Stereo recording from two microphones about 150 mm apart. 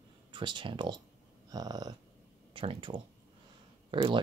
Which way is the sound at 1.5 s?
25° right (ahead or behind).